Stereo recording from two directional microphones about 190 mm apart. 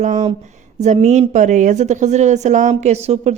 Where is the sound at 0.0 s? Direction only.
40° right (ahead or behind).